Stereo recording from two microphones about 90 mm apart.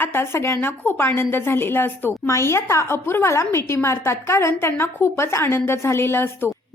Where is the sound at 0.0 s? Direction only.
25° left (ahead or behind).